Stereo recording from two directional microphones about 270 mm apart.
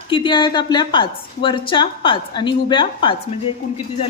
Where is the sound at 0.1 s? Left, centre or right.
Centre.